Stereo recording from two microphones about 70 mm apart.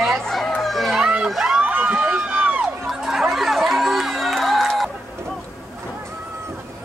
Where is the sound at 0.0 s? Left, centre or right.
Centre.